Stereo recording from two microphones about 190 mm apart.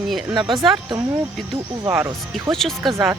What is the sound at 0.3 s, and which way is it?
Speech, 25° right (ahead or behind).